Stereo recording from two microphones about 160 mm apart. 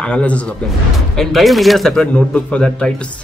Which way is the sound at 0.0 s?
5° left (ahead or behind).